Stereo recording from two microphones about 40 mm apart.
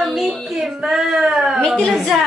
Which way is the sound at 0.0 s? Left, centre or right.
Centre.